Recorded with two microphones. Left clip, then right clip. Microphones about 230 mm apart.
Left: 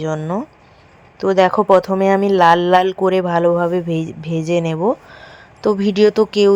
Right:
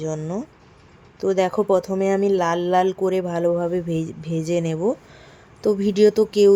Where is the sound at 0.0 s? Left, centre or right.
Centre.